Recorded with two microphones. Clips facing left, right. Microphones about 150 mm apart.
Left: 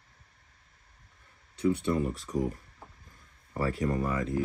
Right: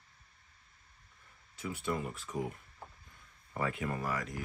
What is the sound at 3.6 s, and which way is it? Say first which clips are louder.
Speech: left 6 dB; 35° left (ahead or behind).